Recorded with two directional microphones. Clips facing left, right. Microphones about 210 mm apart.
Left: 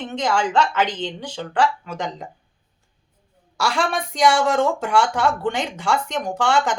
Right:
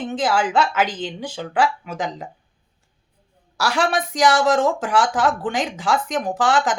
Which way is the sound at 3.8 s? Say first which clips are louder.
Right 6 dB; 90° right.